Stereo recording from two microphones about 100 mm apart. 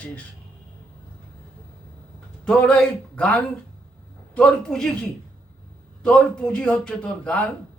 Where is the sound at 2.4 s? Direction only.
10° left (ahead or behind).